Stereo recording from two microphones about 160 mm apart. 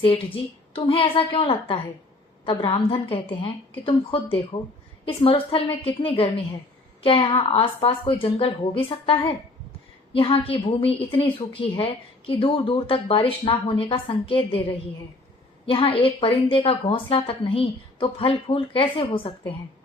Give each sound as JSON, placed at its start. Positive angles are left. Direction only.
{"t": 0.7, "sound": "a woman's voice", "side_deg": 35}
{"t": 15.6, "sound": "a woman's voice", "side_deg": 35}